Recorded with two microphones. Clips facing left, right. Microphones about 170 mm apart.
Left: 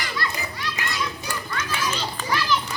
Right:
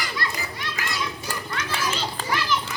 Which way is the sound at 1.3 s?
35° right (ahead or behind).